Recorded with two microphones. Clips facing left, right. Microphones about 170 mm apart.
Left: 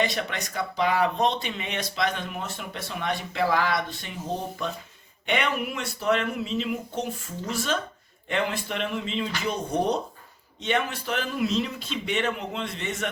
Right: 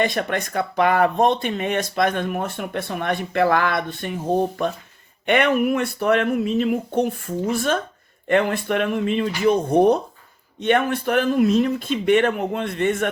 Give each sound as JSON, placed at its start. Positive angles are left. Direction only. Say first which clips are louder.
{"t": 0.0, "sound": "speech", "louder": "right 6 dB", "side_deg": -50}